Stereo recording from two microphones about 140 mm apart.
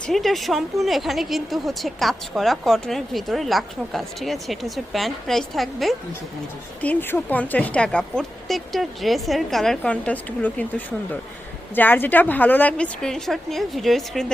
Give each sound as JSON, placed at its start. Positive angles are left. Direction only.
{"t": 0.1, "sound": "speech", "side_deg": 0}
{"t": 6.8, "sound": "speech", "side_deg": 10}